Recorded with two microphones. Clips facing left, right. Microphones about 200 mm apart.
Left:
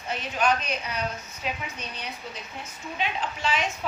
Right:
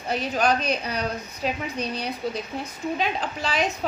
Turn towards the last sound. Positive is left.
turn(degrees=-35)  # may be behind; listen again after turning